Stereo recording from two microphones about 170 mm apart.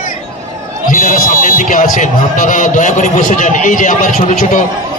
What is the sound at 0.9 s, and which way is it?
A man's voice, 50° left (ahead or behind).